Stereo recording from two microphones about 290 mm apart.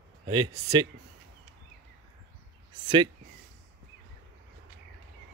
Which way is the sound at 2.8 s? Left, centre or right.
Centre.